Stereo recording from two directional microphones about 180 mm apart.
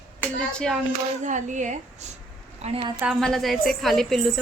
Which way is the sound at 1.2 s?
45° right (ahead or behind).